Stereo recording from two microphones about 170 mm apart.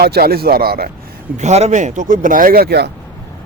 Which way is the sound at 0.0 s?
65° right (ahead or behind).